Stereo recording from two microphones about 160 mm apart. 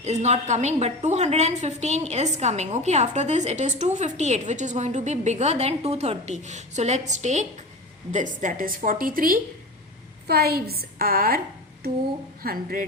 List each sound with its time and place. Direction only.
0.0 s a woman's voice: 45° right (ahead or behind); by 9.4 s 60° right (ahead or behind)
10.2 s a woman's voice: 80° right
12.4 s a woman's voice: 65° right (ahead or behind)